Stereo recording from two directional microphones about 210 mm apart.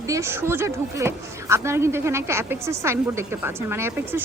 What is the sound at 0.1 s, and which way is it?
A woman's voice, 10° right (ahead or behind).